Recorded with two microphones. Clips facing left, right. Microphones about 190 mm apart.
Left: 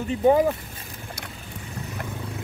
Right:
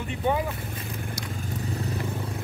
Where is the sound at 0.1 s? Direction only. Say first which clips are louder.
Left 8 dB; 35° left (ahead or behind).